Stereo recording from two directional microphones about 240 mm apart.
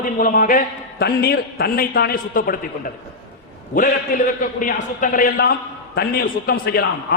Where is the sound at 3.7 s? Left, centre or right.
Left.